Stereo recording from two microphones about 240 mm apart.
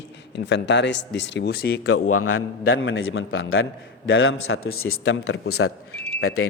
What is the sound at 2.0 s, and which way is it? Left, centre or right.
A man's voice, left.